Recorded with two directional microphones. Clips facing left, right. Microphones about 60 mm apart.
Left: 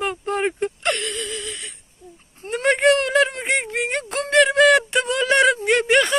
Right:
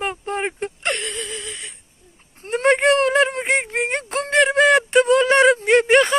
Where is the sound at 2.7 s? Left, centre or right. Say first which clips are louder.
Right 1 dB; right.